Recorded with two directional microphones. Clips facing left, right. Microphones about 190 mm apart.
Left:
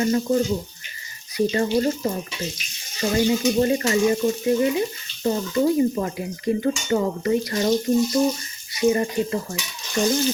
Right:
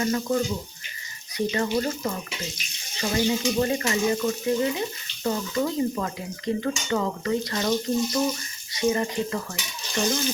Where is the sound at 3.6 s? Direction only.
30° left (ahead or behind).